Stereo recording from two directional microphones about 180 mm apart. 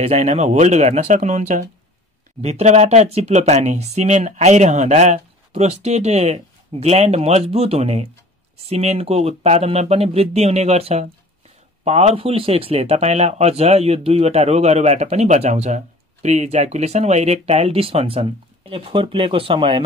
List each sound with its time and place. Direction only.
0.0 s speech: 35° right (ahead or behind)